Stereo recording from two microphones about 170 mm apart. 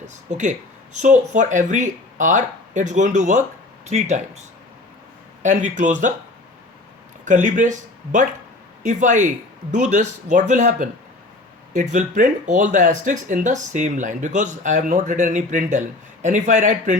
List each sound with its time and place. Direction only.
0.3 s speech: 45° right (ahead or behind)
7.3 s speech: 50° right (ahead or behind)